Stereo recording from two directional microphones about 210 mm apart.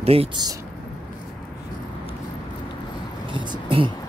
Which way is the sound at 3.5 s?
25° right (ahead or behind).